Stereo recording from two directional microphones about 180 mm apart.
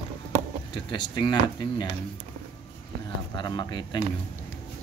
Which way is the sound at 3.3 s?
25° left (ahead or behind).